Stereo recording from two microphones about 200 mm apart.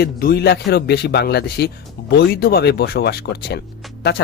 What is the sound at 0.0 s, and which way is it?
Speech, 50° left (ahead or behind).